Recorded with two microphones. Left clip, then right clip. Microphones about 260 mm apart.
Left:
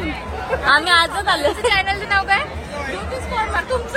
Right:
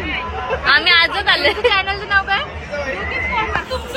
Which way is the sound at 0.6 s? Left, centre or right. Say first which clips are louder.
Right 2 dB; left.